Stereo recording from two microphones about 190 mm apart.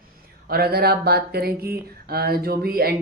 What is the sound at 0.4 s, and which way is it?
Speech, 55° right (ahead or behind).